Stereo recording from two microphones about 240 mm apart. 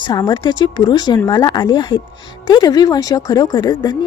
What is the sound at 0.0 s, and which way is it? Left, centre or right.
Speech, centre.